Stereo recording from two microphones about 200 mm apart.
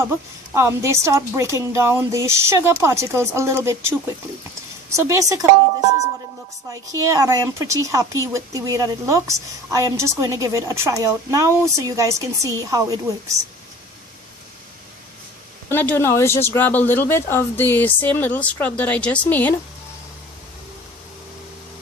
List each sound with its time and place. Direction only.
0.5 s a woman's voice: 15° right (ahead or behind)
6.7 s a woman's voice: 15° right (ahead or behind)
15.7 s speech: 10° left (ahead or behind)